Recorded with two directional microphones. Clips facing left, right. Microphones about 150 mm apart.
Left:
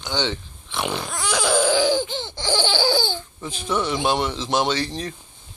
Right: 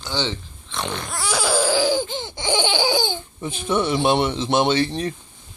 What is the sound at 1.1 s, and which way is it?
Laughter, 5° right (ahead or behind).